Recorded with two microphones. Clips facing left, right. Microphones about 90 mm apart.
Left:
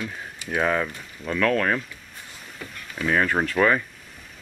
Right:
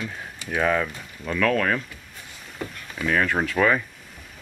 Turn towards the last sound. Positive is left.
turn(degrees=0)  # may be behind; listen again after turning